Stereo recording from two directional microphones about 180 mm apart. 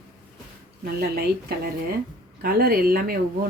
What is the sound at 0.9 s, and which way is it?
Speech, 60° right (ahead or behind).